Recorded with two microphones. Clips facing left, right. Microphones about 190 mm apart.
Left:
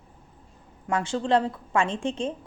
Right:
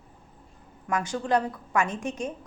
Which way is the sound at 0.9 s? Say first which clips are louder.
Left 2 dB; 25° left (ahead or behind).